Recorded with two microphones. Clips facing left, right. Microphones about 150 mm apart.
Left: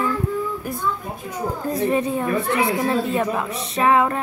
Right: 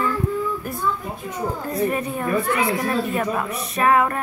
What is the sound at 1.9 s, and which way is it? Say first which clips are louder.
Music: left 3 dB; 25° left (ahead or behind).